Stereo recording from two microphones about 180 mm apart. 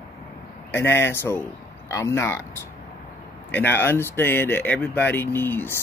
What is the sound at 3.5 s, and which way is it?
Speech, 10° left (ahead or behind).